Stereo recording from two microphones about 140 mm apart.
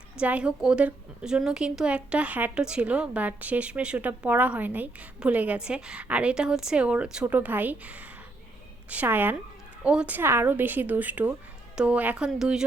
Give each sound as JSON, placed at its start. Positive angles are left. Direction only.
{"t": 0.2, "sound": "a woman's voice", "side_deg": -10}